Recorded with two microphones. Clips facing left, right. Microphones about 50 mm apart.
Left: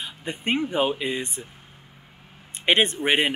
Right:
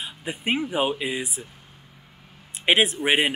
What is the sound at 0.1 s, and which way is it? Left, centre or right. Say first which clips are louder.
Speech: even; centre.